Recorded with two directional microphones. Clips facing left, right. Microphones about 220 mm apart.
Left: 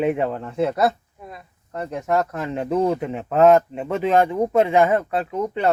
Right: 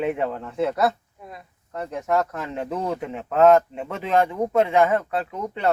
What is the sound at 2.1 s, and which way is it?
A man's voice, 10° left (ahead or behind).